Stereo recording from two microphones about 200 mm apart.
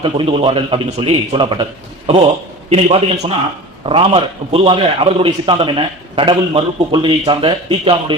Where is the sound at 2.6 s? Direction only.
30° right (ahead or behind).